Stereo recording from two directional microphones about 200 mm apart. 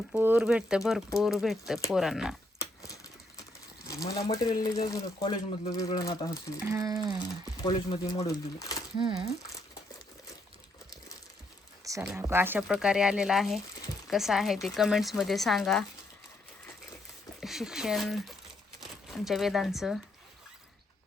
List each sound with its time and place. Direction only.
0.1 s speech: 10° right (ahead or behind)
2.6 s a sound: 15° left (ahead or behind)
3.8 s speech: 15° left (ahead or behind)
6.6 s speech: 15° right (ahead or behind)
7.2 s speech: 20° left (ahead or behind)
9.0 s speech: 25° right (ahead or behind)
11.9 s speech: 15° right (ahead or behind); by 15.9 s centre (ahead or behind)
17.4 s speech: centre (ahead or behind)